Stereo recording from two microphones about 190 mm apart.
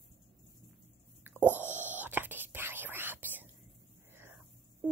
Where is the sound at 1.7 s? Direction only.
10° right (ahead or behind).